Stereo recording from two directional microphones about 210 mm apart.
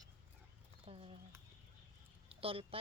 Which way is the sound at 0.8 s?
25° right (ahead or behind).